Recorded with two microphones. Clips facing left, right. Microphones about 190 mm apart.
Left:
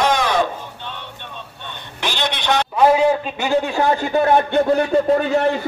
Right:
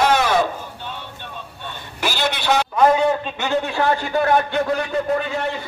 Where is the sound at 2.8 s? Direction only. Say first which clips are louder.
Left 3 dB; 10° left (ahead or behind); by 5.2 s 30° left (ahead or behind).